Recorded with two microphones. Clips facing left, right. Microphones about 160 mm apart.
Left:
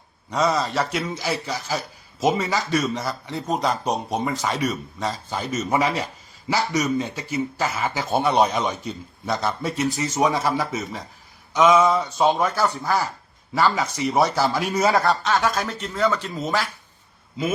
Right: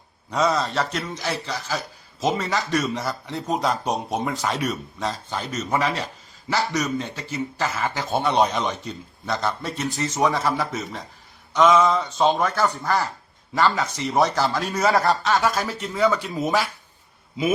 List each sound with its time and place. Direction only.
0.3 s speech: centre (ahead or behind)
6.5 s speech: centre (ahead or behind)
10.5 s speech: centre (ahead or behind)
14.9 s speech: centre (ahead or behind)